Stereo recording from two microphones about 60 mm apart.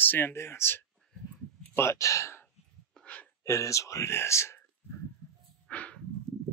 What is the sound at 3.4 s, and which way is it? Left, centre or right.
Speech, left.